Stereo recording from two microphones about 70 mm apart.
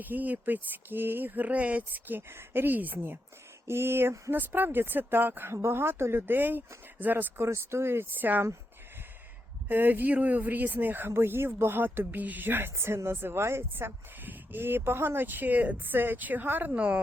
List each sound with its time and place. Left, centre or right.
0.0 s speech: right
9.6 s speech: right